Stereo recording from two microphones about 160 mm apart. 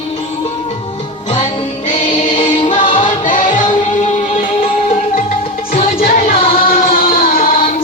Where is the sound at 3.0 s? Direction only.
55° left (ahead or behind).